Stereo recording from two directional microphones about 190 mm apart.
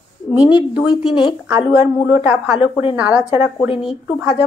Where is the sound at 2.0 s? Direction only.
10° right (ahead or behind).